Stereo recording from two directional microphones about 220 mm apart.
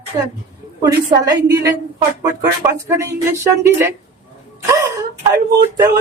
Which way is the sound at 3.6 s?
10° right (ahead or behind).